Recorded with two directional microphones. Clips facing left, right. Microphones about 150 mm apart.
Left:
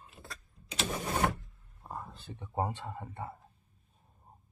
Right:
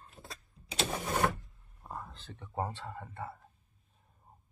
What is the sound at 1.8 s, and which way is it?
Speech, 5° left (ahead or behind).